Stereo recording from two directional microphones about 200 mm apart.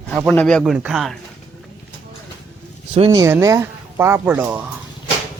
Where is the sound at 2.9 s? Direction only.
25° right (ahead or behind).